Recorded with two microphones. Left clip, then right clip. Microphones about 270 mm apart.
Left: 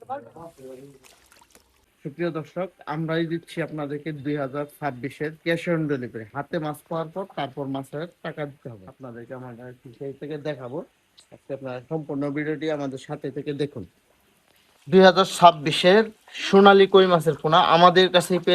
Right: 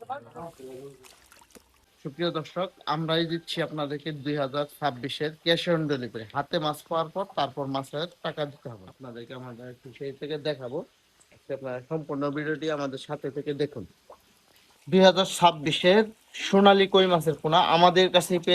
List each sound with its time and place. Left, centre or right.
2.1 s speech: centre
9.0 s speech: centre
10.2 s speech: centre
11.4 s speech: left
14.9 s speech: centre